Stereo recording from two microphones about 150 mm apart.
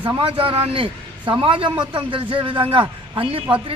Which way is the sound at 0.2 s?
40° right (ahead or behind).